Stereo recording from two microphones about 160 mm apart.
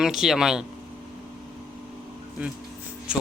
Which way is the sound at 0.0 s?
5° right (ahead or behind).